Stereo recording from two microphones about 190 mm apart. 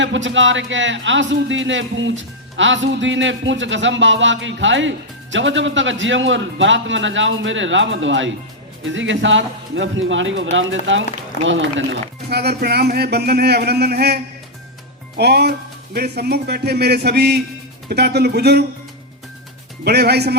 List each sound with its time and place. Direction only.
0.0 s a man's voice: 75° right (ahead or behind); by 14.2 s 60° right (ahead or behind)
15.2 s speech: 60° right (ahead or behind)
19.8 s speech: 60° right (ahead or behind)